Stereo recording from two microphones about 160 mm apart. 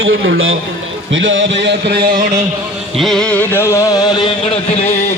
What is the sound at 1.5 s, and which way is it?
Speech, 90° right.